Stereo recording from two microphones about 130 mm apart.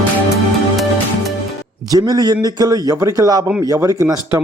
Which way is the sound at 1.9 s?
30° right (ahead or behind).